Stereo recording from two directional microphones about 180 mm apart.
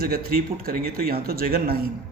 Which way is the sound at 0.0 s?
55° right (ahead or behind).